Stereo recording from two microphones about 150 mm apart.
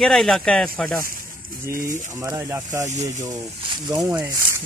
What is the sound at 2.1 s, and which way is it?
Speech, 20° right (ahead or behind).